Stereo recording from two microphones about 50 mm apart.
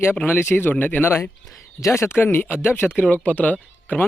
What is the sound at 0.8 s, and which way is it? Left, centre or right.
Speech, left.